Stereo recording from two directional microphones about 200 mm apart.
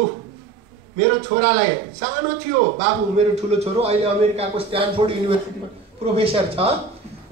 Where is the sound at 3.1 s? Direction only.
30° right (ahead or behind).